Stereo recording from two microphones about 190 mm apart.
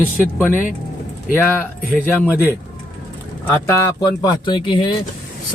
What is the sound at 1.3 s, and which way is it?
Speech, 10° left (ahead or behind).